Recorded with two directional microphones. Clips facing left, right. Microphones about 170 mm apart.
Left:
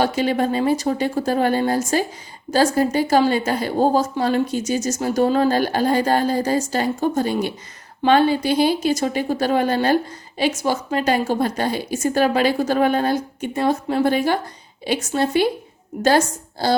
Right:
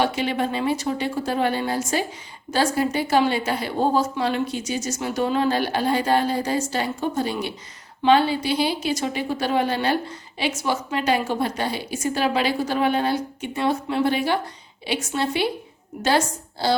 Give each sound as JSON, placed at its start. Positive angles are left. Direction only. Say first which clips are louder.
{"t": 0.0, "sound": "a woman's voice", "louder": "left 3 dB", "side_deg": 40}